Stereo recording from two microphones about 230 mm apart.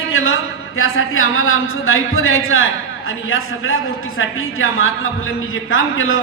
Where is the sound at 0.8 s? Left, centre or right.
Left.